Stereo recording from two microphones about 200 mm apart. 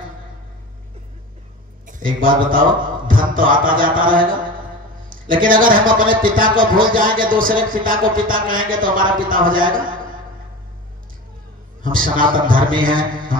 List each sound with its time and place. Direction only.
1.9 s a man's voice: 45° right (ahead or behind)
11.8 s a man's voice: 45° right (ahead or behind)